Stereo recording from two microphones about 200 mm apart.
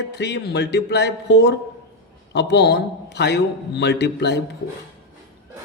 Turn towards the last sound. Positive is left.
turn(degrees=60)  # may be behind; listen again after turning